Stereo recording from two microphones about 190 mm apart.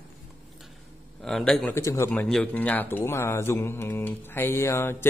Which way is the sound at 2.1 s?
5° left (ahead or behind).